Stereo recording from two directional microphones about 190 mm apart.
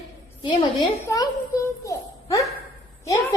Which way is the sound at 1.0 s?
15° left (ahead or behind).